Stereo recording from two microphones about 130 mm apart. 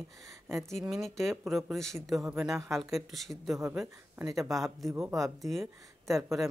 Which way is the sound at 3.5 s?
25° right (ahead or behind).